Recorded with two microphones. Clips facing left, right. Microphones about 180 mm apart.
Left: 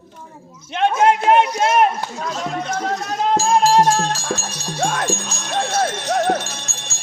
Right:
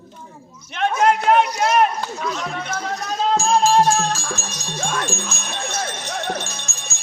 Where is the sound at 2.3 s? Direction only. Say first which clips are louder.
Left 3 dB; 45° left (ahead or behind).